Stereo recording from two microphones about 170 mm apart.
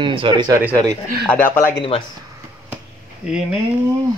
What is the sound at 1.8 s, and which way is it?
Speech, 35° left (ahead or behind).